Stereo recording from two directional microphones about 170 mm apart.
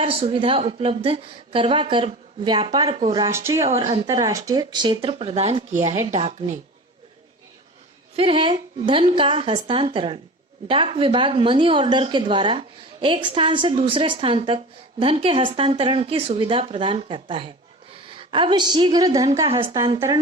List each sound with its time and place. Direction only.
0.0 s a woman's voice: 35° right (ahead or behind)
3.2 s speech: 15° right (ahead or behind)
3.7 s speech: 30° right (ahead or behind)
5.0 s a woman's voice: 35° right (ahead or behind)
8.1 s a woman's voice: 30° right (ahead or behind)
19.5 s a woman's voice: 30° right (ahead or behind)